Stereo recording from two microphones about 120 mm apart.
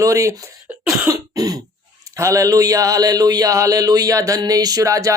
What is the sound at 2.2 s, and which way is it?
Speech, 30° right (ahead or behind).